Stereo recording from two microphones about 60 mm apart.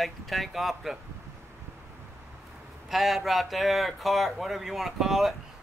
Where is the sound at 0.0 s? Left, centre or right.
Centre.